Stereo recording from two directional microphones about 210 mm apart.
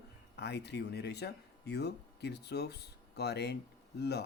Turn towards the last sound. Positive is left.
turn(degrees=50)  # may be behind; listen again after turning